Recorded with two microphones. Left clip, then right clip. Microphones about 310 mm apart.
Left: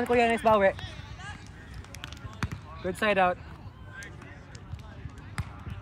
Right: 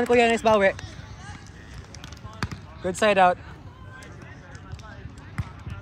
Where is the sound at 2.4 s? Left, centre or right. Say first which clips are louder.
Right 4 dB; right.